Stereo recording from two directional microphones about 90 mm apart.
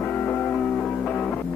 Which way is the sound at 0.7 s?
15° left (ahead or behind).